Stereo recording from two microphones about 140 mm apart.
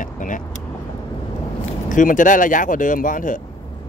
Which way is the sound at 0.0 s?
70° left (ahead or behind).